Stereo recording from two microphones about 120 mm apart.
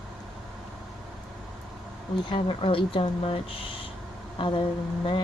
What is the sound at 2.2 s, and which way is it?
Speech, 45° left (ahead or behind).